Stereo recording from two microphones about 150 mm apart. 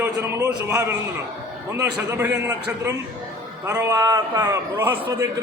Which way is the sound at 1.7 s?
20° right (ahead or behind).